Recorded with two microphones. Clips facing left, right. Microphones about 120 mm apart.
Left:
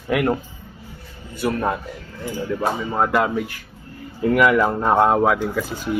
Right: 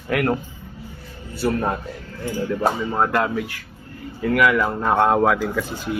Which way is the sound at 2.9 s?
10° left (ahead or behind).